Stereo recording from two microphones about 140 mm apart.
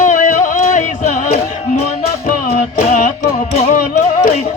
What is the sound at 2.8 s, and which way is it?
Music, 60° left (ahead or behind).